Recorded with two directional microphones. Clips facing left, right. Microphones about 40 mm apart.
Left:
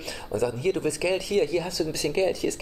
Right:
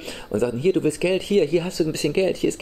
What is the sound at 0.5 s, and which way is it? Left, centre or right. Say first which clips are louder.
Speech: right 6 dB; right.